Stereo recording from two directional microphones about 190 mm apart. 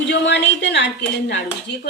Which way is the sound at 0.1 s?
65° left (ahead or behind).